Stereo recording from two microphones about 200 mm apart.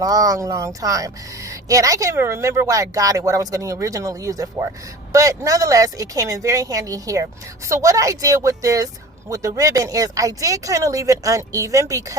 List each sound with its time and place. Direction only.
0.0 s speech: 20° right (ahead or behind)